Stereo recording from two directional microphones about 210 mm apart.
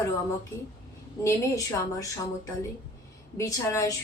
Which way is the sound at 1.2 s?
15° left (ahead or behind).